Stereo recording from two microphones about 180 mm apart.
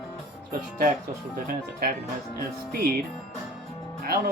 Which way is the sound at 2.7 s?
55° right (ahead or behind).